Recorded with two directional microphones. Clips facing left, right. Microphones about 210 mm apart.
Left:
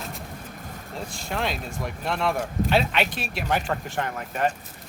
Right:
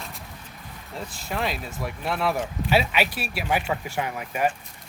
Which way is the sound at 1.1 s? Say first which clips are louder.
Even; centre (ahead or behind).